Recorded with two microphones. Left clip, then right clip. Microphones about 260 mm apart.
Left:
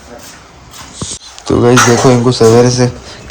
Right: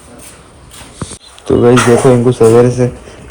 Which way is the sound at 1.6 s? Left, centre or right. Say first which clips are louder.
Even; centre.